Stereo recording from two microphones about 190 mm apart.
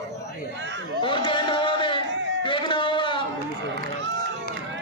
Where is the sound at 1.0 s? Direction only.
25° left (ahead or behind).